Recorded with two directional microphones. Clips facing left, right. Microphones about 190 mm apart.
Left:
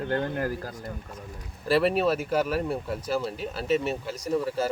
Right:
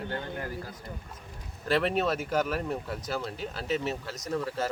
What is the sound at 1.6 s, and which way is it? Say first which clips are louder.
Speech: left 4 dB; 5° left (ahead or behind).